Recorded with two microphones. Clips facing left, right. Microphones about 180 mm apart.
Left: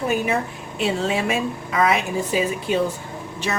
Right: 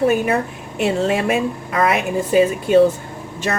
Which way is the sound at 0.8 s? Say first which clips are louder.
Right 4 dB; 50° right (ahead or behind).